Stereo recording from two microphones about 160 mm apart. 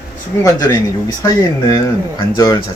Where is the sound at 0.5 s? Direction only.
25° left (ahead or behind).